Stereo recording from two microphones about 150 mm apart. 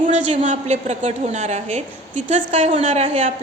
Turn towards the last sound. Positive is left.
turn(degrees=-50)  # may be behind; listen again after turning